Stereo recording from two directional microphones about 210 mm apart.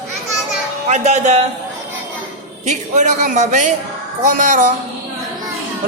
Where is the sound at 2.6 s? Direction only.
35° right (ahead or behind).